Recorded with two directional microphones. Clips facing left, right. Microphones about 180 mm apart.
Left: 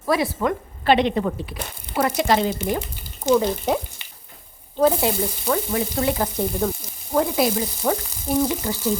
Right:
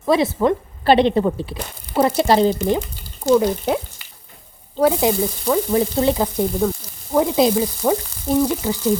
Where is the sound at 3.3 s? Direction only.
5° right (ahead or behind).